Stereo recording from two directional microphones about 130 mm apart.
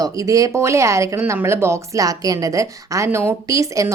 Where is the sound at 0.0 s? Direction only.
25° right (ahead or behind).